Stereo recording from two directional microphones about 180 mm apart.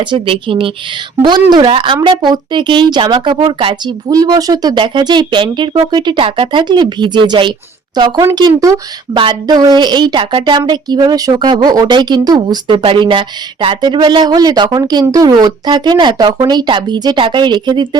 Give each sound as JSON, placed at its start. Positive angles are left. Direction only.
{"t": 0.0, "sound": "a woman's voice", "side_deg": -25}